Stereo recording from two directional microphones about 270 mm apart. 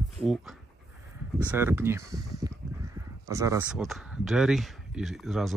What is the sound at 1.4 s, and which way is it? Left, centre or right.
Speech, centre.